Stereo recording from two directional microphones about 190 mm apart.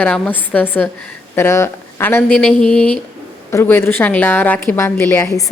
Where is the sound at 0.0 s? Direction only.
5° left (ahead or behind).